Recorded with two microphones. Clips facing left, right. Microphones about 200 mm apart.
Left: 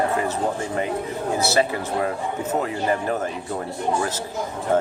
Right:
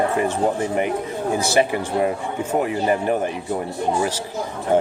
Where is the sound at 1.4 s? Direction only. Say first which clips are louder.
Right 1 dB; 15° right (ahead or behind).